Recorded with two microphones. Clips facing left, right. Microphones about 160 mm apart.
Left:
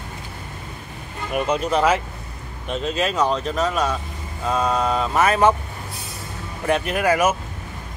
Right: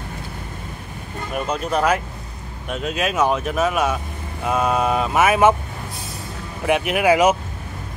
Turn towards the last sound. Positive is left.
turn(degrees=-15)  # may be behind; listen again after turning